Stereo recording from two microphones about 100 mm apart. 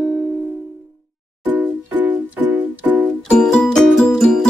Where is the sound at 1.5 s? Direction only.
15° right (ahead or behind).